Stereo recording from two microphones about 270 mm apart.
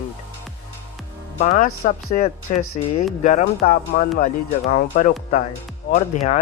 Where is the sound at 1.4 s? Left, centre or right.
Left.